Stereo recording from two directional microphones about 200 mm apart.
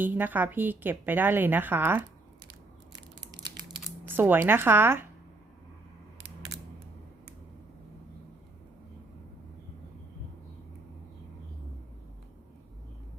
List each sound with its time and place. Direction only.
0.0 s a woman's voice: 10° right (ahead or behind)
2.9 s crushing: 20° right (ahead or behind)
3.7 s speech: 5° right (ahead or behind)